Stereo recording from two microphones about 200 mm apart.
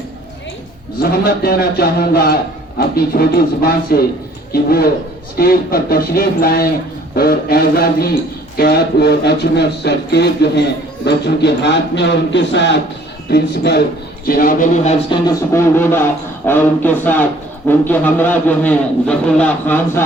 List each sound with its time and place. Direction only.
0.9 s a man's voice: 50° left (ahead or behind)
15.1 s a man's voice: 10° left (ahead or behind)